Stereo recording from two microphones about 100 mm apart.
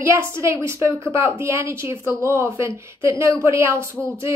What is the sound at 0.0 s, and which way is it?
Speech, 25° right (ahead or behind).